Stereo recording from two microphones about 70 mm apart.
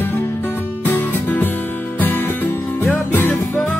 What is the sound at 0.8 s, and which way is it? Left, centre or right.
Music, left.